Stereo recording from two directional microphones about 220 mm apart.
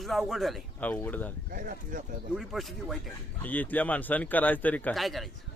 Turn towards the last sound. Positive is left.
turn(degrees=0)  # may be behind; listen again after turning